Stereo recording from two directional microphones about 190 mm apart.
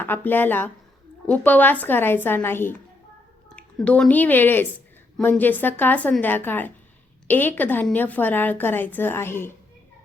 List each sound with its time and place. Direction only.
0.0 s a woman's voice: 10° left (ahead or behind)